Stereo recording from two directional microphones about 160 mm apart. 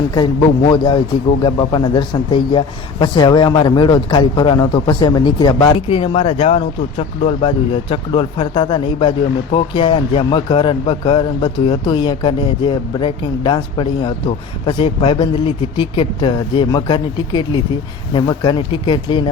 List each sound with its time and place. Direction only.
0.7 s speech: 30° left (ahead or behind)